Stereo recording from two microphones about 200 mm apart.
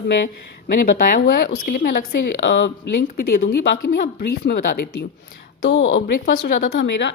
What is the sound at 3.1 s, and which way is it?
Speech, 50° left (ahead or behind).